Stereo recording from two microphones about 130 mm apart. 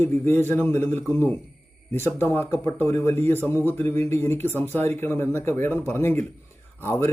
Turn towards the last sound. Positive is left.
turn(degrees=15)  # may be behind; listen again after turning